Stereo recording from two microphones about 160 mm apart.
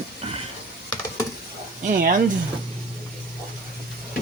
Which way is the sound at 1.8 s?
60° right (ahead or behind).